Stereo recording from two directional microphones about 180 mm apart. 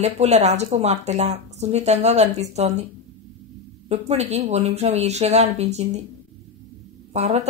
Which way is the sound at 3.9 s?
35° right (ahead or behind).